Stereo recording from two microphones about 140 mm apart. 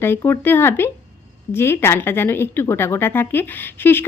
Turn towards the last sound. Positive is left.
turn(degrees=15)  # may be behind; listen again after turning